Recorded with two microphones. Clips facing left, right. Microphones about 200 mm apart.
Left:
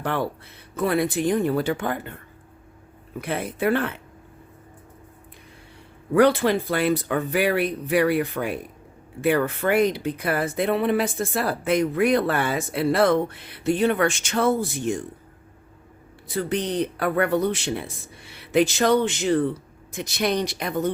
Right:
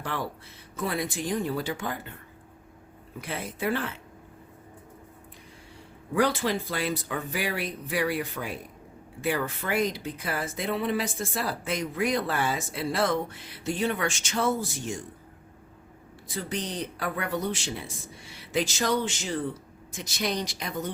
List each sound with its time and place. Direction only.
0.0 s speech: 60° left (ahead or behind)
3.2 s speech: 60° left (ahead or behind)
6.1 s speech: 60° left (ahead or behind)
16.3 s speech: 60° left (ahead or behind)